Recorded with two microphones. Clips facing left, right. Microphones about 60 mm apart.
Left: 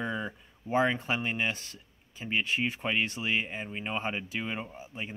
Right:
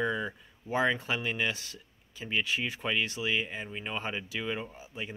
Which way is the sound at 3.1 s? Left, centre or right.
Left.